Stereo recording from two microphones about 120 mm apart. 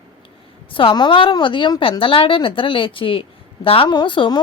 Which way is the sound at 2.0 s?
45° left (ahead or behind).